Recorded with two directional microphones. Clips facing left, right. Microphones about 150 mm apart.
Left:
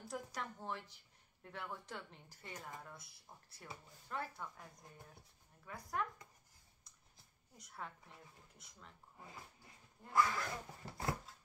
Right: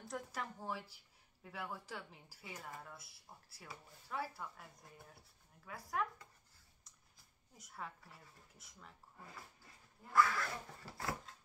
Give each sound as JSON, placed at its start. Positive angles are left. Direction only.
{"t": 0.1, "sound": "a woman's voice", "side_deg": -5}
{"t": 7.5, "sound": "speech", "side_deg": 0}
{"t": 9.2, "sound": "a sound", "side_deg": 20}